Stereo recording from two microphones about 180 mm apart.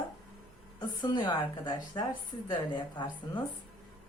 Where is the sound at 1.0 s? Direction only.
25° left (ahead or behind).